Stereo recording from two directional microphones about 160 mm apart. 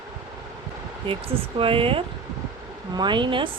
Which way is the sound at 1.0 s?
35° right (ahead or behind).